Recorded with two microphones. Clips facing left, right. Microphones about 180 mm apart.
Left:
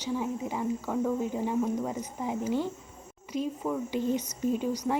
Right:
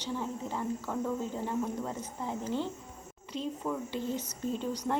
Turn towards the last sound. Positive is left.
turn(degrees=10)  # may be behind; listen again after turning